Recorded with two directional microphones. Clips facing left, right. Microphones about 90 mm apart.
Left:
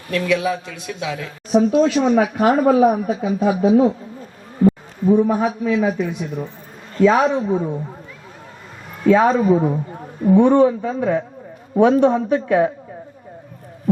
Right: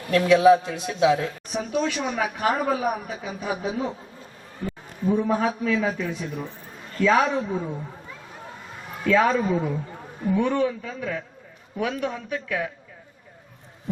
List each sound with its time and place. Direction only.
0.3 s speech: 30° right (ahead or behind)
1.5 s speech: 35° left (ahead or behind)
4.6 s a sound: 25° left (ahead or behind)
5.1 s a man's voice: 20° left (ahead or behind)
9.0 s a man's voice: 25° left (ahead or behind)